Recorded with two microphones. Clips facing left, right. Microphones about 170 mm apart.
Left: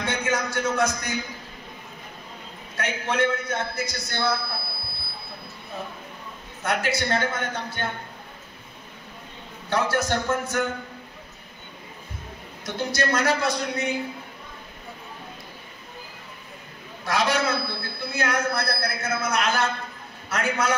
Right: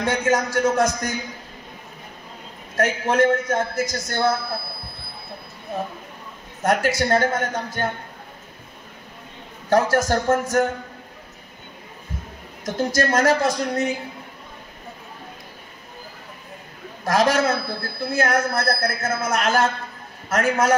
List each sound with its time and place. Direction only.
0.0 s a man's voice: 40° right (ahead or behind)
2.7 s a man's voice: 45° right (ahead or behind)
6.6 s a man's voice: 45° right (ahead or behind)
9.7 s a man's voice: 45° right (ahead or behind)
12.6 s a man's voice: 45° right (ahead or behind)
17.0 s a man's voice: 45° right (ahead or behind)